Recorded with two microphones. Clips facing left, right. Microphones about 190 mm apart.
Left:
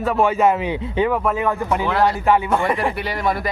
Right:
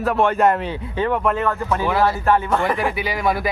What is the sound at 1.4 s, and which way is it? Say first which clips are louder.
A man's voice: left 1 dB; 15° left (ahead or behind).